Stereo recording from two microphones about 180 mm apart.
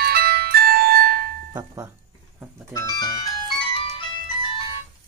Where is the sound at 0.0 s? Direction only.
60° right (ahead or behind).